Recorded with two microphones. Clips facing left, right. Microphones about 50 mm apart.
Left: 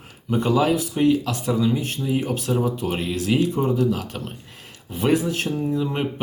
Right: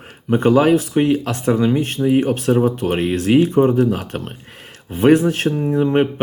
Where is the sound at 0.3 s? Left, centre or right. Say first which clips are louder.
Right 6 dB; right.